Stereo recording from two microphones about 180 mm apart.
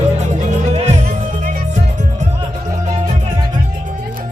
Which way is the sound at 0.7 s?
35° right (ahead or behind).